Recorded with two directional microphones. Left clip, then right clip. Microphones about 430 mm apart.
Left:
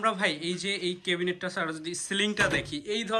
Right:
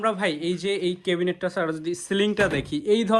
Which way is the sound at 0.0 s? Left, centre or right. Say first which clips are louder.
Right 3 dB; centre.